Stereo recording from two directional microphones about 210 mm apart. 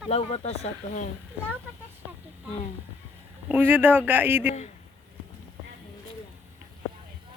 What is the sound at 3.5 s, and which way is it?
Speech, 10° right (ahead or behind).